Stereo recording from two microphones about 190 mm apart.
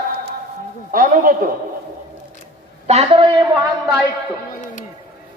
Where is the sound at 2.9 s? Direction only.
30° right (ahead or behind).